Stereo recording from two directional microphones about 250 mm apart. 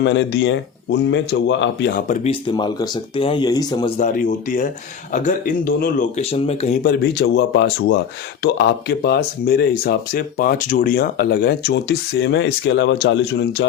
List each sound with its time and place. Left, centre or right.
0.0 s speech: left
2.5 s speech: centre
6.8 s speech: left